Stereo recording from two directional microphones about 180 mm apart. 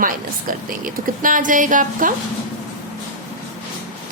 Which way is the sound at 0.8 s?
50° right (ahead or behind).